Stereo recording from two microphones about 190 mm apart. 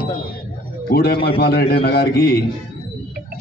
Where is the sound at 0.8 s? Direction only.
55° left (ahead or behind).